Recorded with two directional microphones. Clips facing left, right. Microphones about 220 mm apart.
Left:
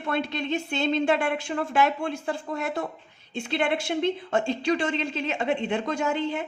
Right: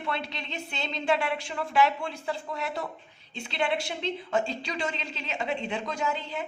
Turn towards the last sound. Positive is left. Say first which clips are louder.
# left 5 dB
turn(degrees=50)  # may be behind; listen again after turning